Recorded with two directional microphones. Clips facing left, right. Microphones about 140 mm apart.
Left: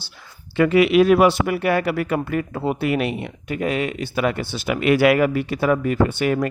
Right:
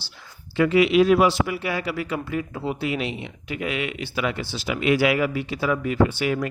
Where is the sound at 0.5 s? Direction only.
55° left (ahead or behind).